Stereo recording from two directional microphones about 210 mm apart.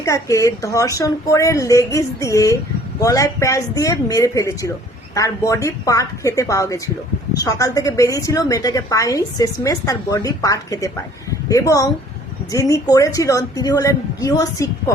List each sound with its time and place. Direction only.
0.0 s a woman's voice: 15° left (ahead or behind)